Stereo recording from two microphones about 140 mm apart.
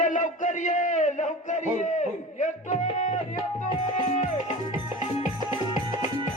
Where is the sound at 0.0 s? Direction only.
60° left (ahead or behind).